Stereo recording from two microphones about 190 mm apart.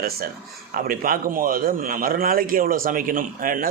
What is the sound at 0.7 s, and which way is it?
A man's voice, 50° right (ahead or behind).